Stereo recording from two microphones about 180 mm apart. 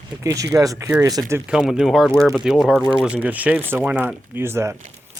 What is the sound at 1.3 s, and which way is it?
Speech, 5° right (ahead or behind).